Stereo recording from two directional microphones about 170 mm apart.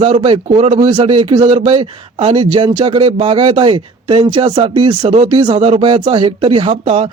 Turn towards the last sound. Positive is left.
turn(degrees=-35)  # may be behind; listen again after turning